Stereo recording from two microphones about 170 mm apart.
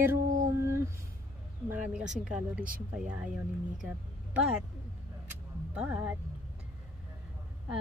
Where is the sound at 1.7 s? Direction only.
10° right (ahead or behind).